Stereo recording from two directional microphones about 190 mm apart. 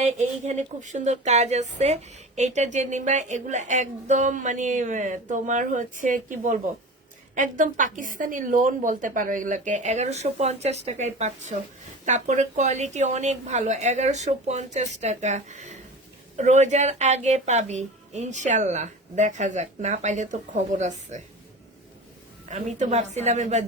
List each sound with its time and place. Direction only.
0.0 s a woman's voice: 40° right (ahead or behind)
22.4 s speech: 40° right (ahead or behind)